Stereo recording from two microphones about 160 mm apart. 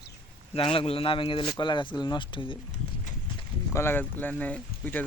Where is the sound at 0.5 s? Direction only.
35° left (ahead or behind).